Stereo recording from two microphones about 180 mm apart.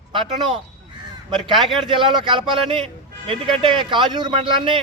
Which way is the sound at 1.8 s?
25° right (ahead or behind).